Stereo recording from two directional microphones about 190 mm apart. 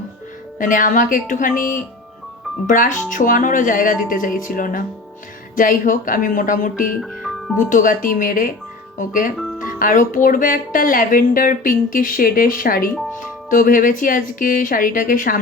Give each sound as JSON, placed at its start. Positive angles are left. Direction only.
{"t": 0.6, "sound": "speech", "side_deg": 45}
{"t": 7.0, "sound": "music", "side_deg": 0}
{"t": 7.7, "sound": "speech", "side_deg": 45}